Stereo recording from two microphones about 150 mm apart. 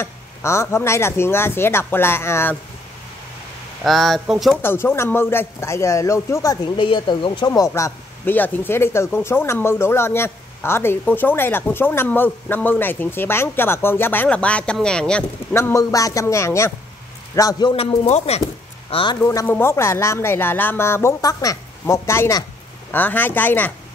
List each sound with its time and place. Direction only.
0.0 s speech: 20° left (ahead or behind)
3.8 s speech: centre (ahead or behind)
4.6 s speech: 15° left (ahead or behind)
15.5 s a man's voice: 20° left (ahead or behind); by 19.1 s 35° left (ahead or behind)
19.2 s speech: 15° left (ahead or behind)